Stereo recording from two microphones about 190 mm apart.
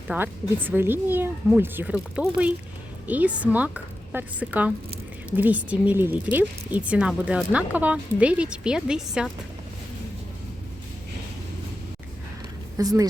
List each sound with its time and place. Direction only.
0.1 s speech: 10° right (ahead or behind)
12.7 s speech: 20° right (ahead or behind)